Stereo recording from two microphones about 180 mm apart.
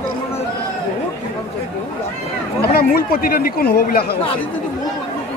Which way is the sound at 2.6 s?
55° left (ahead or behind).